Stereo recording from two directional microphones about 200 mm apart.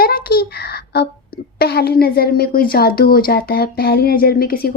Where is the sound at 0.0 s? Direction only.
50° left (ahead or behind).